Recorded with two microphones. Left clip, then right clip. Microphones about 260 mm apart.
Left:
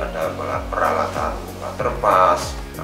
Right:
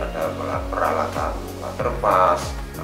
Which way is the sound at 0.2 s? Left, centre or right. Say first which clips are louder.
Even; centre.